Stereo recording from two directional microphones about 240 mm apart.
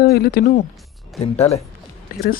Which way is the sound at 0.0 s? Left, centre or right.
Left.